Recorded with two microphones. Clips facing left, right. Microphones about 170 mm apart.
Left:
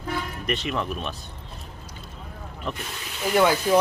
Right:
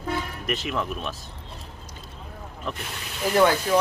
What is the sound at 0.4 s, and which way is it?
Speech, centre (ahead or behind).